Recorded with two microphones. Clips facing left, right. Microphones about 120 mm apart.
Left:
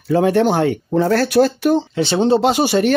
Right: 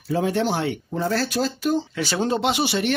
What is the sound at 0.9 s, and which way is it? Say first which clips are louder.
Speech: left 10 dB; 65° left (ahead or behind).